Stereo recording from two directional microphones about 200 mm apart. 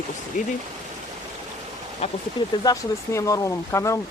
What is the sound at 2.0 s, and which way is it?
Speech, 30° left (ahead or behind).